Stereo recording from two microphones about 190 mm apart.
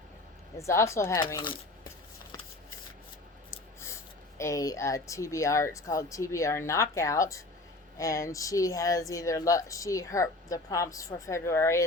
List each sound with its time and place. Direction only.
0.5 s speech: 15° left (ahead or behind)
3.5 s a sound: 15° left (ahead or behind)
4.4 s speech: 15° left (ahead or behind)